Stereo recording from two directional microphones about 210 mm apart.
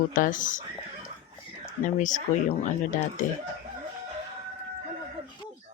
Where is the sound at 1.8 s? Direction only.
35° left (ahead or behind).